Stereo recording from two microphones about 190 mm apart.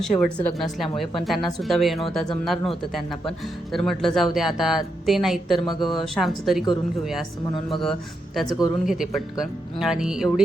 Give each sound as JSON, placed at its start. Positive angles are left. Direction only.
{"t": 0.3, "sound": "speech", "side_deg": 5}
{"t": 8.4, "sound": "speech", "side_deg": 20}
{"t": 8.8, "sound": "speech", "side_deg": 0}